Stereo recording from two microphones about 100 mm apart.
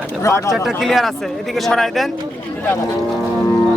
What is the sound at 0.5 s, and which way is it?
Speech, centre (ahead or behind).